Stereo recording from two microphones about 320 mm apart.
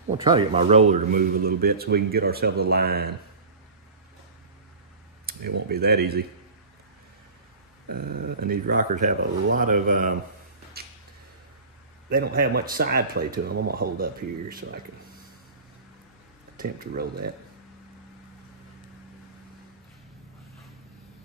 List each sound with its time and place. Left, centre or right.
0.2 s speech: centre; by 3.1 s right
5.7 s speech: right
7.9 s speech: right
10.8 s a sound: right
12.1 s speech: right
16.5 s speech: right